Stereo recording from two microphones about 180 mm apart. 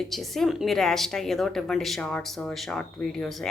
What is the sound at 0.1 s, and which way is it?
A woman's voice, centre (ahead or behind).